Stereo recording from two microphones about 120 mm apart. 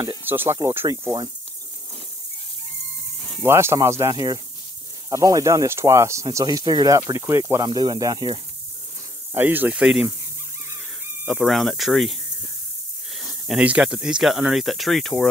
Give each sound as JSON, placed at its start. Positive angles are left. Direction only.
{"t": 0.2, "sound": "speech", "side_deg": -15}
{"t": 3.4, "sound": "speech", "side_deg": -20}
{"t": 6.2, "sound": "speech", "side_deg": -35}
{"t": 7.6, "sound": "speech", "side_deg": -35}
{"t": 9.3, "sound": "speech", "side_deg": -15}
{"t": 11.2, "sound": "speech", "side_deg": 0}
{"t": 13.5, "sound": "speech", "side_deg": -10}